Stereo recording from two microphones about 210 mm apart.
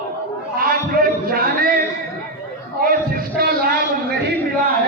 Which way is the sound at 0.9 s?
45° right (ahead or behind).